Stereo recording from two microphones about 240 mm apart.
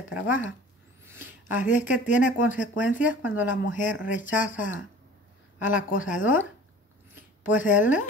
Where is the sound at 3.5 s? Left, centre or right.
Left.